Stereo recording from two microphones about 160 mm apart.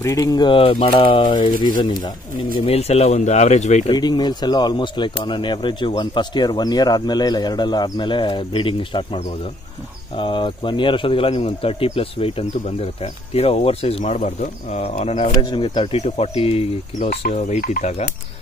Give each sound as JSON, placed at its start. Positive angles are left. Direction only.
{"t": 0.0, "sound": "speech", "side_deg": 20}
{"t": 2.6, "sound": "speech", "side_deg": 40}
{"t": 3.9, "sound": "speech", "side_deg": 25}